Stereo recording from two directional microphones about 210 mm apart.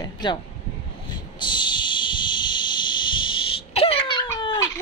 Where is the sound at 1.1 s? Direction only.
20° left (ahead or behind).